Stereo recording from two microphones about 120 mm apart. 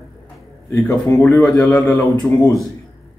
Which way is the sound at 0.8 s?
20° left (ahead or behind).